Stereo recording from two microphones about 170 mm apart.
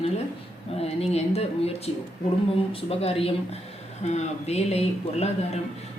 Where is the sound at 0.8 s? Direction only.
40° left (ahead or behind).